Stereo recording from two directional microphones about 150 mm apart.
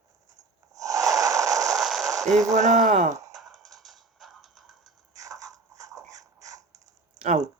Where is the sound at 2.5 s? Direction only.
50° right (ahead or behind).